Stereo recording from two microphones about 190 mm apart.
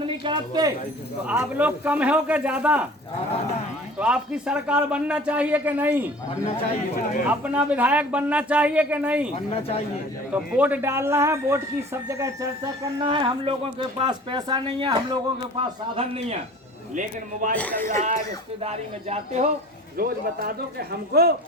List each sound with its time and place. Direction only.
0.0 s a sound: 25° right (ahead or behind)
1.3 s speech: 10° right (ahead or behind)
3.9 s a man's voice: 5° right (ahead or behind)
6.9 s speech: 45° left (ahead or behind)
7.3 s speech: 5° right (ahead or behind)
9.3 s speech: 35° left (ahead or behind)
10.3 s speech: 10° right (ahead or behind); by 16.4 s 30° right (ahead or behind)
16.9 s speech: 40° right (ahead or behind)
17.5 s a man's voice: 10° left (ahead or behind)
18.6 s speech: 35° right (ahead or behind)
20.0 s a man's voice: 50° right (ahead or behind)